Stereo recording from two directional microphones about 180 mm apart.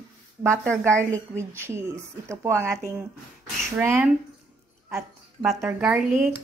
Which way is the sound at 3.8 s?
10° right (ahead or behind).